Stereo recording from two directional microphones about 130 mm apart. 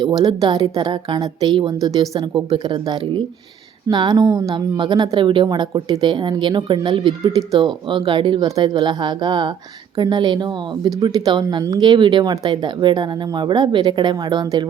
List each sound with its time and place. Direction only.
0.2 s a woman's voice: 35° right (ahead or behind)